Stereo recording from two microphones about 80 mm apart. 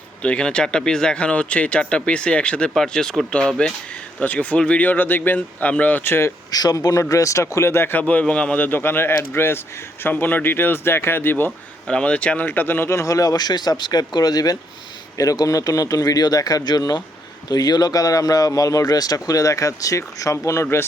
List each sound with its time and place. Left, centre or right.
0.2 s speech: centre
6.5 s speech: left
8.0 s speech: centre
11.9 s speech: centre; by 20.8 s left